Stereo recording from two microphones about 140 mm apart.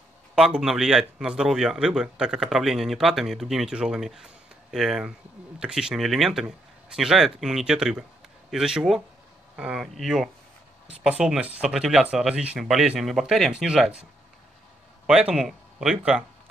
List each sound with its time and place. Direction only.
0.4 s a man's voice: 5° right (ahead or behind)
15.0 s a man's voice: 5° right (ahead or behind)